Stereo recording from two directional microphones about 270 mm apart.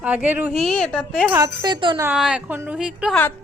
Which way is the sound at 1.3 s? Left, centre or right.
Centre.